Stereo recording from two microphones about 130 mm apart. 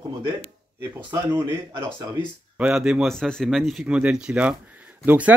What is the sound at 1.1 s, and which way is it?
Speech, 20° right (ahead or behind).